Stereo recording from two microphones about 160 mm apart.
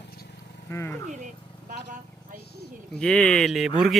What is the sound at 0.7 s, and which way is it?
Speech, 15° left (ahead or behind).